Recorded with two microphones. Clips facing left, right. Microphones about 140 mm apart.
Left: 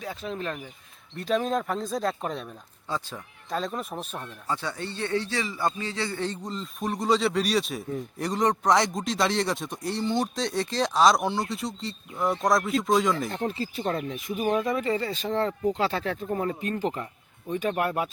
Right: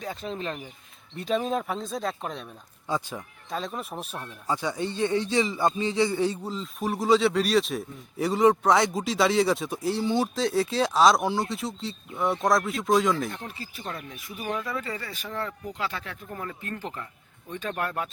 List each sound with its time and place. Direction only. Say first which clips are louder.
0.0 s speech: even; centre (ahead or behind)
2.8 s a man's voice: right 3 dB; 15° right (ahead or behind)
3.5 s a man's voice: left 2 dB; centre (ahead or behind)
13.3 s speech: left 9 dB; 30° left (ahead or behind); by 18.1 s 15° left (ahead or behind)